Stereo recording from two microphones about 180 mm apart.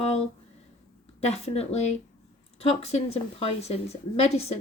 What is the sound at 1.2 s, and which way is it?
A woman's voice, 35° left (ahead or behind).